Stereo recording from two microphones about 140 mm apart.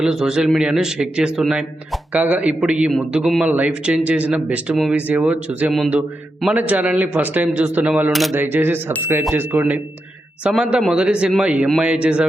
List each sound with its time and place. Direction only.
0.0 s a man's voice: 5° right (ahead or behind)
8.1 s a man's voice: centre (ahead or behind)
8.4 s speech: 15° right (ahead or behind)